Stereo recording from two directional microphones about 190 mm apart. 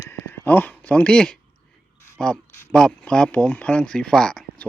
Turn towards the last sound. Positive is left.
turn(degrees=5)  # may be behind; listen again after turning